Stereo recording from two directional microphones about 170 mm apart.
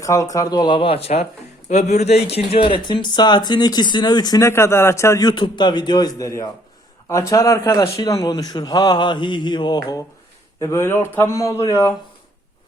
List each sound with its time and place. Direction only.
0.0 s speech: 20° left (ahead or behind)